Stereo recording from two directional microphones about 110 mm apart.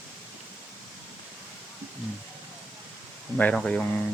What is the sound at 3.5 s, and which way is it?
Speech, 5° left (ahead or behind).